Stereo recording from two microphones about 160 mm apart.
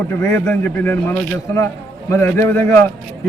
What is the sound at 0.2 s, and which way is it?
A man's voice, 20° left (ahead or behind).